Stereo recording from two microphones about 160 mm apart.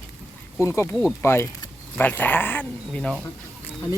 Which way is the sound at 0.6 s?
20° left (ahead or behind).